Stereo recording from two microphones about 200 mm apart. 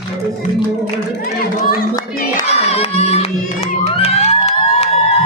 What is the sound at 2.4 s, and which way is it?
Crowd, 30° left (ahead or behind).